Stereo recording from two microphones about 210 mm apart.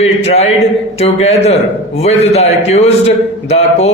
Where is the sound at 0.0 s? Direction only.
30° left (ahead or behind).